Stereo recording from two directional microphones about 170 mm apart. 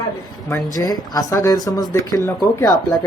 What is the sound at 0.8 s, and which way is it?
Speech, 20° left (ahead or behind).